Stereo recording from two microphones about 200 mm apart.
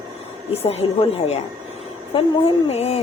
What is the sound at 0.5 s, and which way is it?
Speech, 30° left (ahead or behind).